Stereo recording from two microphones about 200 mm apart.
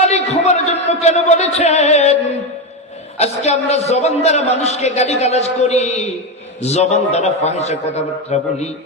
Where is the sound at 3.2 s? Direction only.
35° left (ahead or behind).